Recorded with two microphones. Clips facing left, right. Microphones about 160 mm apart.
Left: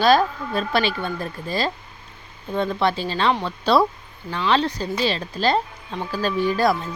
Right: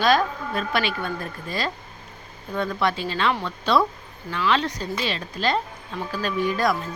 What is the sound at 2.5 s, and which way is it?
Speech, 25° left (ahead or behind).